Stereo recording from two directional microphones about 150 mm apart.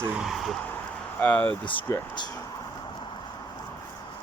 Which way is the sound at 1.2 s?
10° left (ahead or behind).